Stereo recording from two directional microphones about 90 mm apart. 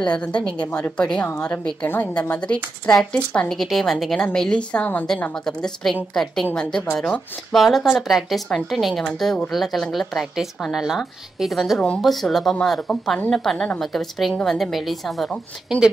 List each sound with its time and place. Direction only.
0.0 s speech: 10° left (ahead or behind)
0.7 s a woman's voice: 25° left (ahead or behind)
0.9 s a woman's voice: 10° left (ahead or behind)